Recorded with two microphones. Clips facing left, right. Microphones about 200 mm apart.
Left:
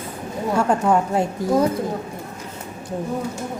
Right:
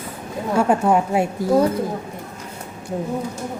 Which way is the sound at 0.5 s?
5° right (ahead or behind).